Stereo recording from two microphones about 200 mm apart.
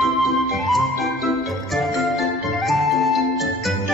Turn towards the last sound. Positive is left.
turn(degrees=0)  # may be behind; listen again after turning